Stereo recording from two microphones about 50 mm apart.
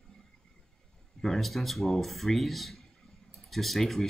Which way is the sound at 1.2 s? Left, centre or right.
Centre.